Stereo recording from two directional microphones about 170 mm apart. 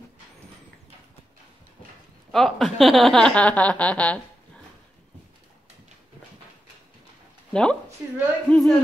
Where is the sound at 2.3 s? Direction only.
Centre (ahead or behind).